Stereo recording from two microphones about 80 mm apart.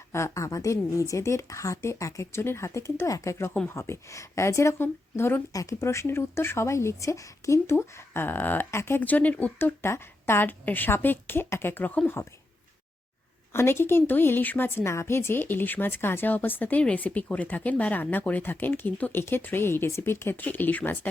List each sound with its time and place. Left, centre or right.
0.1 s a woman's voice: left
13.5 s speech: left